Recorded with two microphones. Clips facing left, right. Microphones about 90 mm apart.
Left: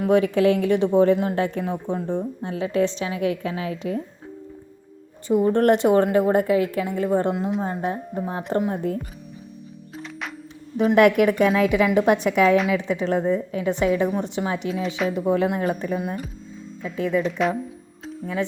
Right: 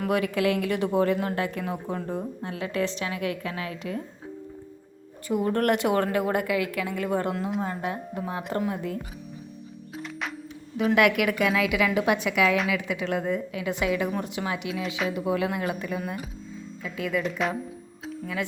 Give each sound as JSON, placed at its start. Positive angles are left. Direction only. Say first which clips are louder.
{"t": 0.0, "sound": "a woman's voice", "louder": "left 7 dB", "side_deg": 30}
{"t": 5.3, "sound": "a woman's voice", "louder": "left 6 dB", "side_deg": 25}
{"t": 7.6, "sound": "a woman's voice", "louder": "left 4 dB", "side_deg": 30}
{"t": 8.7, "sound": "speech", "louder": "left 6 dB", "side_deg": 45}
{"t": 10.0, "sound": "music", "louder": "even", "side_deg": 0}
{"t": 10.8, "sound": "a woman's voice", "louder": "left 6 dB", "side_deg": 40}
{"t": 17.2, "sound": "speech", "louder": "left 5 dB", "side_deg": 0}